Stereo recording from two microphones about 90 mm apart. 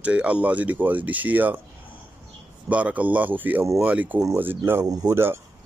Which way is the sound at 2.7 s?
15° right (ahead or behind).